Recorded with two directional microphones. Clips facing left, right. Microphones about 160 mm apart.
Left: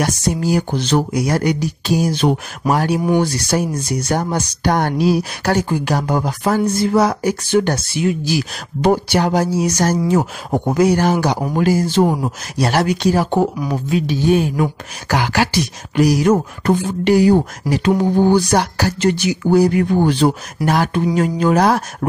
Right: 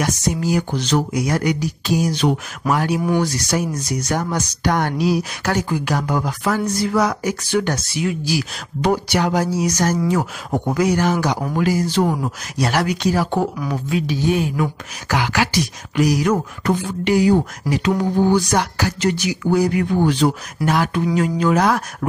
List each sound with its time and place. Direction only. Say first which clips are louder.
0.0 s speech: left 2 dB; 35° left (ahead or behind)